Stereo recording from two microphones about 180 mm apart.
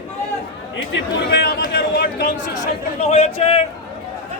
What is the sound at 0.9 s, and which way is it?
A man's voice, 55° left (ahead or behind).